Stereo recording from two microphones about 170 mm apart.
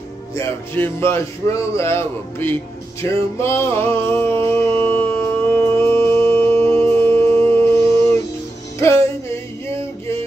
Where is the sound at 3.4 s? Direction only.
15° left (ahead or behind).